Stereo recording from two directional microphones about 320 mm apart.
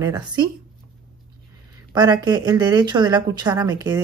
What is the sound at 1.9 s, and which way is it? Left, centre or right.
A woman's voice, centre.